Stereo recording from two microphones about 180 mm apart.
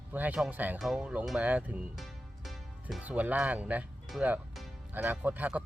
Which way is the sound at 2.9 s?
10° right (ahead or behind).